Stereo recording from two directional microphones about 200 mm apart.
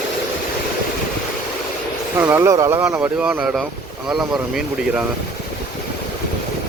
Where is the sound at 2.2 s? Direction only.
10° right (ahead or behind).